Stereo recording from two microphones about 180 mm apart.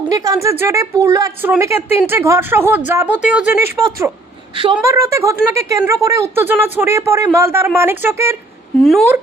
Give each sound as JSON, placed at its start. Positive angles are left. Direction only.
{"t": 0.1, "sound": "speech", "side_deg": -20}
{"t": 3.8, "sound": "a woman's voice", "side_deg": -20}
{"t": 4.8, "sound": "speech", "side_deg": -15}
{"t": 8.8, "sound": "speech", "side_deg": 0}